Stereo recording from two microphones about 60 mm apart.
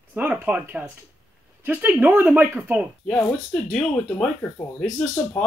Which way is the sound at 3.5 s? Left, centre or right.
Centre.